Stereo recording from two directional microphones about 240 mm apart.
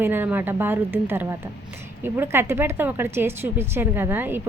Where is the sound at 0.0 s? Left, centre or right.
Centre.